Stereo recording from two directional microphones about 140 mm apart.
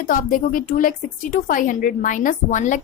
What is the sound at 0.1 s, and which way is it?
A woman's voice, 70° left (ahead or behind).